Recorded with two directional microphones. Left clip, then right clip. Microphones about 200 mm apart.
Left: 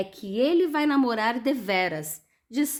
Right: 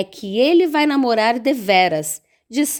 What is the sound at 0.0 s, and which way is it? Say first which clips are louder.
A woman's voice: right 8 dB; 40° right (ahead or behind).